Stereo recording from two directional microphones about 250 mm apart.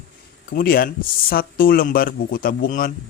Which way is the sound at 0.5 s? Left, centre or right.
Left.